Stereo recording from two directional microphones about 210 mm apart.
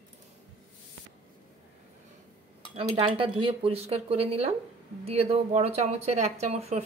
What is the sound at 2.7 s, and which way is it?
A woman's voice, 25° right (ahead or behind).